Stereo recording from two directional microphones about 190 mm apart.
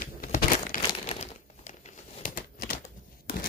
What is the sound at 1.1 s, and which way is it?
Crumpling, 35° left (ahead or behind).